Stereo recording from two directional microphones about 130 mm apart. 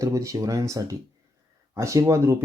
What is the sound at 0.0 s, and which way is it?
Speech, 25° right (ahead or behind).